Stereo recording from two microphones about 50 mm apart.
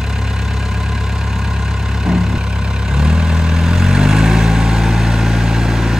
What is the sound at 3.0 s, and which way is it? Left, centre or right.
Vehicle, centre.